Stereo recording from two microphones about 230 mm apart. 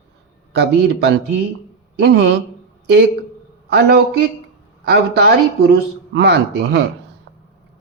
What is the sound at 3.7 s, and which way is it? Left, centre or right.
A woman's voice, right.